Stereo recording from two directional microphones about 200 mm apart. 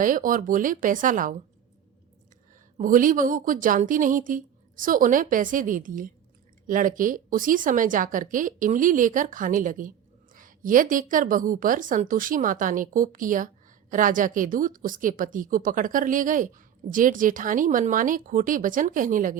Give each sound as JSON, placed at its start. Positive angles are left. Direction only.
{"t": 0.0, "sound": "a woman's voice", "side_deg": -40}
{"t": 2.7, "sound": "a woman's voice", "side_deg": -45}